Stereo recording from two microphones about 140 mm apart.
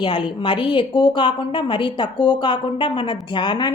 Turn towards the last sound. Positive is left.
turn(degrees=35)  # may be behind; listen again after turning